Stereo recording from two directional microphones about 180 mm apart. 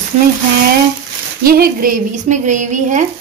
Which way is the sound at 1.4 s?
55° right (ahead or behind).